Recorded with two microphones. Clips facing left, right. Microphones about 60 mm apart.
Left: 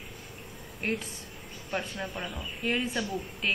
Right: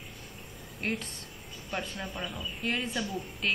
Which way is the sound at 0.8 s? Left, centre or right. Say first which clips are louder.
Left 2 dB; centre.